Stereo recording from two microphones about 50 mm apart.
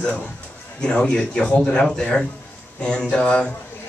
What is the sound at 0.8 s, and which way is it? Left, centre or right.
A man's voice, centre.